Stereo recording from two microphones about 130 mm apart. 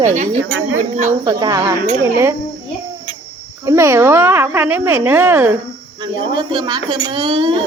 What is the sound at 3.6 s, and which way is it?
Speech, 20° right (ahead or behind).